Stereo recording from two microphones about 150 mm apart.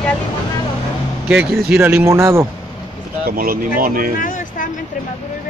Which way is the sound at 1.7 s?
10° right (ahead or behind).